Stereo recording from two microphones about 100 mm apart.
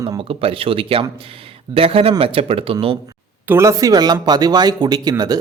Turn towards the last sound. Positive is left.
turn(degrees=-40)  # may be behind; listen again after turning